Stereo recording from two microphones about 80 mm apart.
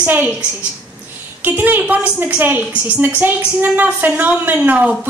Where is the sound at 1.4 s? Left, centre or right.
Right.